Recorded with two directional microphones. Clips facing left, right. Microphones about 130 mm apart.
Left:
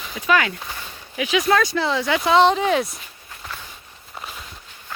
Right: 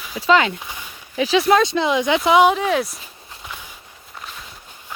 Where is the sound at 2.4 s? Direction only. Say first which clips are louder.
Right 1 dB; 5° right (ahead or behind).